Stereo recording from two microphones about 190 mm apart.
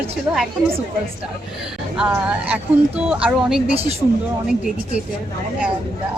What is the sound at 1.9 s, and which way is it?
Speech, 5° right (ahead or behind).